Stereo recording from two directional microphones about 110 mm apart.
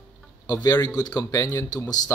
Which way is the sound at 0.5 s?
35° left (ahead or behind).